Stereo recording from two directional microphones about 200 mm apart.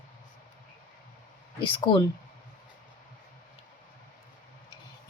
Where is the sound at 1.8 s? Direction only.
25° left (ahead or behind).